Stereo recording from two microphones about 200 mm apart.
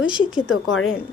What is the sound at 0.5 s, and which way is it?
Speech, 90° left.